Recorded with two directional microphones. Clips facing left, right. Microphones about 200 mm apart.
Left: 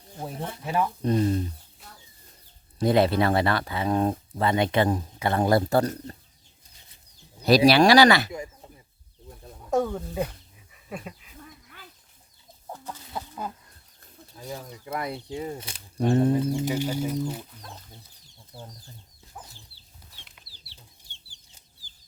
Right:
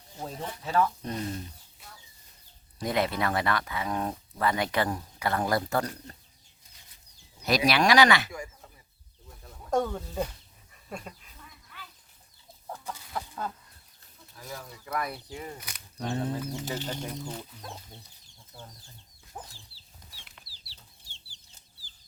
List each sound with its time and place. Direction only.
0.2 s speech: 15° left (ahead or behind)
1.0 s speech: 30° left (ahead or behind)
2.7 s speech: 30° left (ahead or behind)
7.4 s speech: 30° left (ahead or behind)
8.3 s a sound: 20° left (ahead or behind)
9.6 s speech: 5° left (ahead or behind)
10.8 s dog: 5° left (ahead or behind)
13.1 s a sound: 10° left (ahead or behind)
14.3 s speech: 20° left (ahead or behind); by 17.4 s 5° left (ahead or behind)
19.3 s chicken: 20° right (ahead or behind)
20.5 s chicken: 25° left (ahead or behind)